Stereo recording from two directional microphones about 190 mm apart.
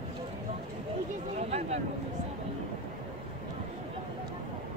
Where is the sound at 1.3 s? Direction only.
35° right (ahead or behind).